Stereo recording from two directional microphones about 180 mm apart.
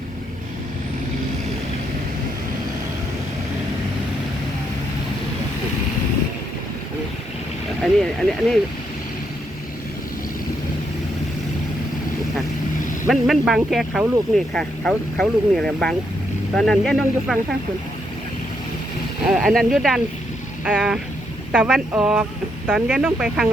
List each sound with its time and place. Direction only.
7.8 s speech: 5° left (ahead or behind)
13.1 s speech: centre (ahead or behind)
19.2 s speech: 5° right (ahead or behind)